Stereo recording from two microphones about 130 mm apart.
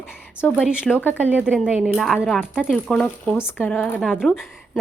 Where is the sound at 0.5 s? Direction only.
10° right (ahead or behind).